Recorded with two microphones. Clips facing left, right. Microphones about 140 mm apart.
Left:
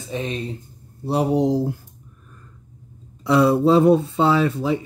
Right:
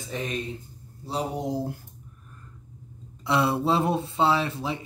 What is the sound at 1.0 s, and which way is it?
Speech, 65° left (ahead or behind).